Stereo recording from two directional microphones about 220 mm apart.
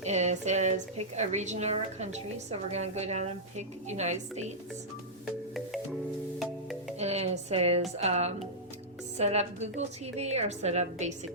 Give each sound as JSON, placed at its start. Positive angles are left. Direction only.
{"t": 0.0, "sound": "speech", "side_deg": -30}
{"t": 5.2, "sound": "music", "side_deg": 0}
{"t": 7.0, "sound": "a sound", "side_deg": -30}
{"t": 7.9, "sound": "a woman's voice", "side_deg": -30}